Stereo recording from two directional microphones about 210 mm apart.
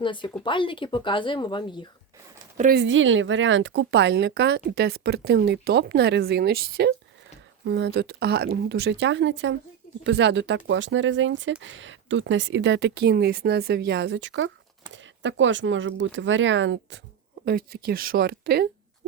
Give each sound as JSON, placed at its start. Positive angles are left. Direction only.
{"t": 0.0, "sound": "speech", "side_deg": 25}
{"t": 2.6, "sound": "speech", "side_deg": -45}
{"t": 2.8, "sound": "speech", "side_deg": -65}
{"t": 17.4, "sound": "speech", "side_deg": -45}